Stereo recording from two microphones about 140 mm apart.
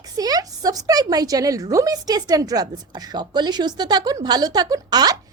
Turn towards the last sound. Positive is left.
turn(degrees=-30)  # may be behind; listen again after turning